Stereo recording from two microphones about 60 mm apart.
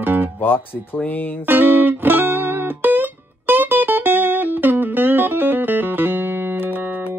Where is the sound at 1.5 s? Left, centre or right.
Right.